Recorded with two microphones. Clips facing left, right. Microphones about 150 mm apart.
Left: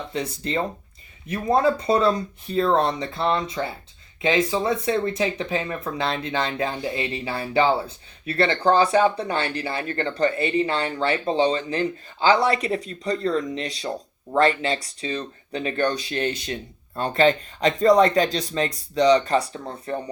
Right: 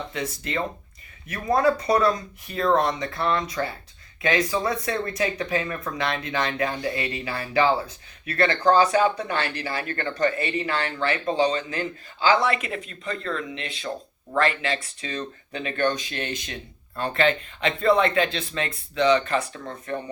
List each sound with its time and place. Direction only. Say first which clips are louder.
0.1 s speech: left 3 dB; 30° left (ahead or behind)